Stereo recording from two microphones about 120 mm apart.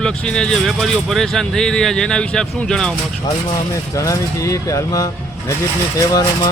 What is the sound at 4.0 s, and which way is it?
Speech, 25° left (ahead or behind).